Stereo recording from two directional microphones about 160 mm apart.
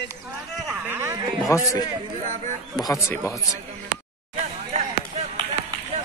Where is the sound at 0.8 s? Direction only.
15° right (ahead or behind).